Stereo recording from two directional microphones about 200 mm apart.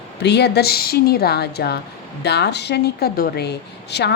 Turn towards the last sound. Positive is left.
turn(degrees=55)  # may be behind; listen again after turning